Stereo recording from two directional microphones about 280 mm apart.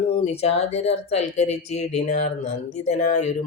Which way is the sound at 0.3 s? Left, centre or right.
Left.